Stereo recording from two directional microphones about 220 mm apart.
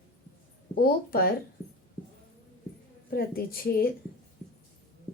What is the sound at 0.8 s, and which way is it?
Speech, 40° left (ahead or behind).